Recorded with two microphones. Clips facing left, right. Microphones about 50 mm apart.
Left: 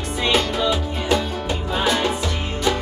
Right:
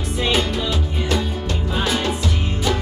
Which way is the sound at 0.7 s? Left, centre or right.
Centre.